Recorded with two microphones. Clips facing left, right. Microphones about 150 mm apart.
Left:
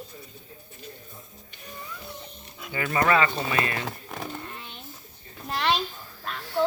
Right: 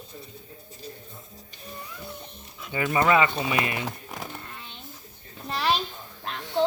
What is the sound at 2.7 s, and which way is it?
Speech, 20° right (ahead or behind).